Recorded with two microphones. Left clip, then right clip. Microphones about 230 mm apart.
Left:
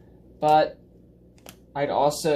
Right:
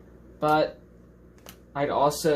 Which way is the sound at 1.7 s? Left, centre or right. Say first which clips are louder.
Left 1 dB; centre.